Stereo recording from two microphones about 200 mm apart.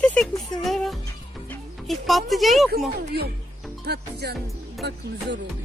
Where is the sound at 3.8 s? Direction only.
55° right (ahead or behind).